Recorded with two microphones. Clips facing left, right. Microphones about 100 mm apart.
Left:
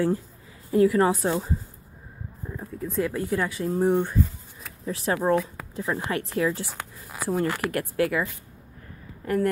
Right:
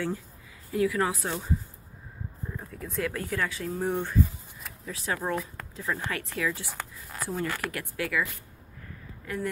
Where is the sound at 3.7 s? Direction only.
20° left (ahead or behind).